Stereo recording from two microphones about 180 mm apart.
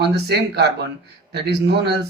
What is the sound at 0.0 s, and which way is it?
Speech, 65° right (ahead or behind).